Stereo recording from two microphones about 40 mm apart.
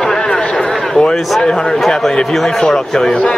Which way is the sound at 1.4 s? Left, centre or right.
Centre.